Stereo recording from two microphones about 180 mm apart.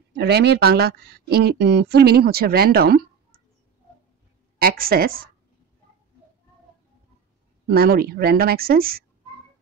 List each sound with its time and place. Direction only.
0.1 s speech: 65° right (ahead or behind)
4.6 s speech: 55° right (ahead or behind)
7.6 s speech: 60° right (ahead or behind)